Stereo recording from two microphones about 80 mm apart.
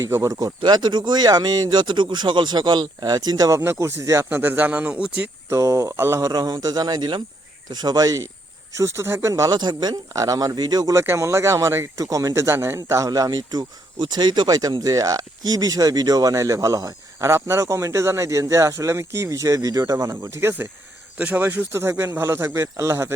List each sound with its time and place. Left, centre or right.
0.1 s speech: right
0.6 s speech: right
3.5 s speech: right
4.3 s speech: right
5.5 s speech: right
8.7 s speech: right
9.5 s speech: right
10.1 s speech: right
10.9 s speech: right
11.9 s speech: right
13.1 s speech: right
20.1 s speech: right